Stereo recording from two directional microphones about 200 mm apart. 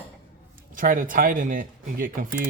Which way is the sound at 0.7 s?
45° right (ahead or behind).